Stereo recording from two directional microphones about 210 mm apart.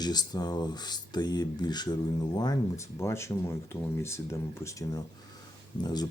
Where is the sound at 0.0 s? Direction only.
20° left (ahead or behind).